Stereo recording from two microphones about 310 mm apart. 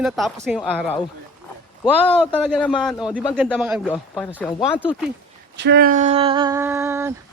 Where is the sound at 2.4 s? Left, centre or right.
Centre.